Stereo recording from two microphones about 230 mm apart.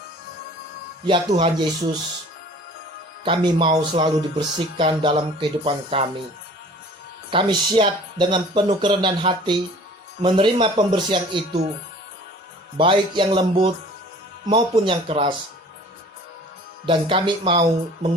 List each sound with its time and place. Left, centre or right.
1.0 s speech: right
3.2 s speech: right
7.3 s speech: right
12.7 s speech: right
16.8 s speech: right